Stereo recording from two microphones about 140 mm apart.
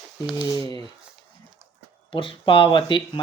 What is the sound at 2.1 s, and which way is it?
Speech, 35° left (ahead or behind).